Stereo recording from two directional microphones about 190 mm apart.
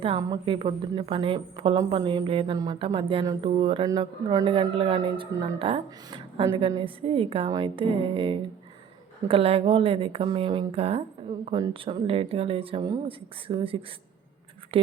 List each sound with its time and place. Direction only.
0.0 s a woman's voice: 25° right (ahead or behind)